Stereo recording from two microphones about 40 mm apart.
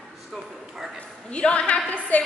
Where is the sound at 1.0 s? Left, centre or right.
Left.